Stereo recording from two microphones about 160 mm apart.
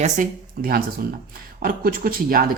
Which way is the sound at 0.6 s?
65° right (ahead or behind).